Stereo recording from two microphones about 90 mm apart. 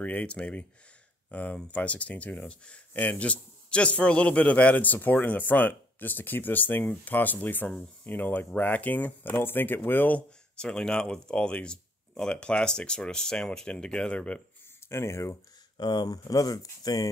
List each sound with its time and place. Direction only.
0.0 s speech: 15° left (ahead or behind)
10.7 s speech: 5° left (ahead or behind)
14.9 s speech: 30° left (ahead or behind)
15.8 s speech: 55° left (ahead or behind)